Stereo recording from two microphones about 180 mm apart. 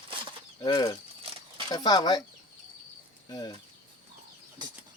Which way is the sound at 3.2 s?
25° left (ahead or behind).